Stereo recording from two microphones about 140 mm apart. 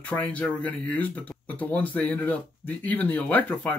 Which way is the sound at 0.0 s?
10° left (ahead or behind).